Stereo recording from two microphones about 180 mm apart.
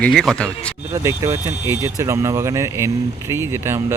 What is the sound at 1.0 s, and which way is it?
Speech, 15° right (ahead or behind).